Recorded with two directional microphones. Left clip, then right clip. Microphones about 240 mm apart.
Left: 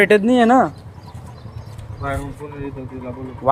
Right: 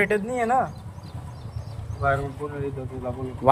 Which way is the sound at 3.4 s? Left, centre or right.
Centre.